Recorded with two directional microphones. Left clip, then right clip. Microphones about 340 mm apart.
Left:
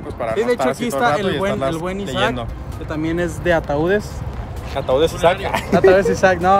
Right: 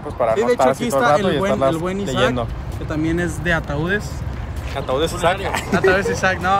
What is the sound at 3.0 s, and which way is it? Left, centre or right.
Speech, left.